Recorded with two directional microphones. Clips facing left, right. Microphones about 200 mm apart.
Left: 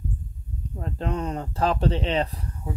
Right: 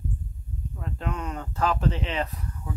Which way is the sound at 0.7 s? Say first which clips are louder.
Left 4 dB; 35° left (ahead or behind).